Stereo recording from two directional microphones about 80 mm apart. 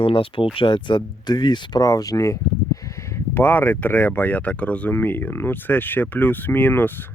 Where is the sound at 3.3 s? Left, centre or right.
Left.